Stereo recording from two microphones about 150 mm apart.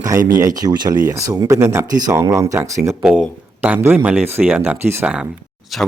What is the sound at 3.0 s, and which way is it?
Speech, 5° right (ahead or behind).